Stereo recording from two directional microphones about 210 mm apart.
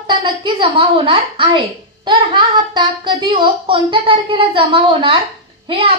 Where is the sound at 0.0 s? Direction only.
25° right (ahead or behind).